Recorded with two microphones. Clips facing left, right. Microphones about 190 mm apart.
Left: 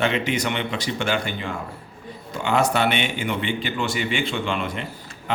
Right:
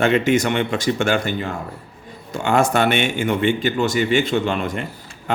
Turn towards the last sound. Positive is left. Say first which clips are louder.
# right 5 dB
turn(degrees=-45)  # may be behind; listen again after turning